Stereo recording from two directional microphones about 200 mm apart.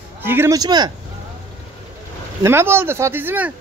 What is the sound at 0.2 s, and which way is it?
Speech, 10° right (ahead or behind).